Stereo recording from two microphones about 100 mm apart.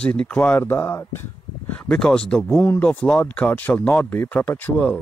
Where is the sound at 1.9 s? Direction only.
5° left (ahead or behind).